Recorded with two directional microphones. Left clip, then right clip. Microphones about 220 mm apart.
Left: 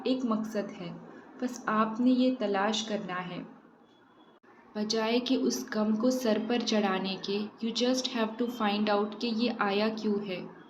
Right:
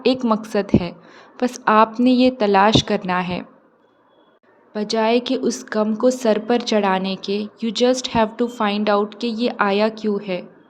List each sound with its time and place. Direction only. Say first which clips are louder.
0.0 s a woman's voice: right 12 dB; 50° right (ahead or behind)
4.7 s a woman's voice: right 11 dB; 45° right (ahead or behind)